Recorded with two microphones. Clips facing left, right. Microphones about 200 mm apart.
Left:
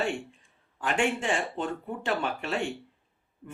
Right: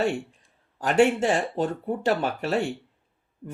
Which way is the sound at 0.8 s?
40° right (ahead or behind).